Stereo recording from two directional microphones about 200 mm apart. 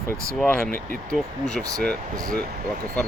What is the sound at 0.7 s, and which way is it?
Speech, 45° right (ahead or behind).